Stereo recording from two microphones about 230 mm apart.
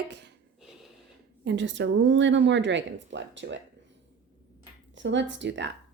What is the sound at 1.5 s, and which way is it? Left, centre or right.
Speech, right.